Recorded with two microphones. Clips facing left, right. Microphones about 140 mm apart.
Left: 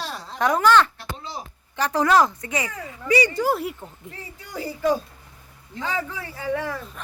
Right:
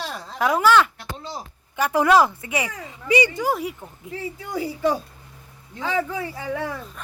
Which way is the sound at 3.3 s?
Centre (ahead or behind).